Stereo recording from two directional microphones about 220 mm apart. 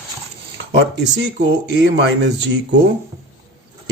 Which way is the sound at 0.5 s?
50° right (ahead or behind).